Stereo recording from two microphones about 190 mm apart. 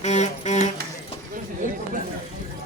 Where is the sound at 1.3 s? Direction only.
45° right (ahead or behind).